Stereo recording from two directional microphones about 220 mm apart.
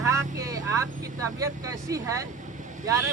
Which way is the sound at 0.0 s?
15° right (ahead or behind).